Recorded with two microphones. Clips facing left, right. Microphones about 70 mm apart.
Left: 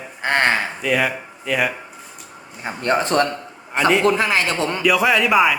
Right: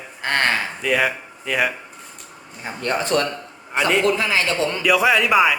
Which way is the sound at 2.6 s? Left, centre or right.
Left.